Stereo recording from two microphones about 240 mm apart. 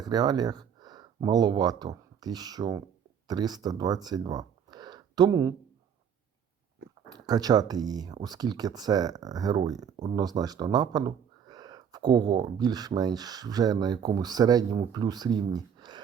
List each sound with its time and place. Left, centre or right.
0.0 s speech: centre
7.1 s speech: centre